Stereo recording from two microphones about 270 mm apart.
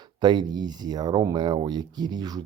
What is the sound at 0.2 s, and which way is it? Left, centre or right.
Speech, centre.